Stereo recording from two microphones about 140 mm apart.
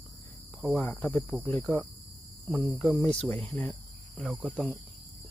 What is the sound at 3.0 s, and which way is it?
Speech, 10° left (ahead or behind).